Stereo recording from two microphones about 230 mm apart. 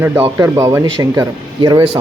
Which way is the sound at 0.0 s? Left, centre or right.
Centre.